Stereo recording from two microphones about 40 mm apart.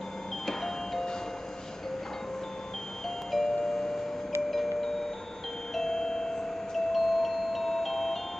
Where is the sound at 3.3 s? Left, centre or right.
Centre.